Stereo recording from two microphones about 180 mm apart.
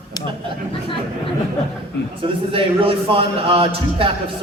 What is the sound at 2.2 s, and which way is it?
A man's voice, 30° right (ahead or behind).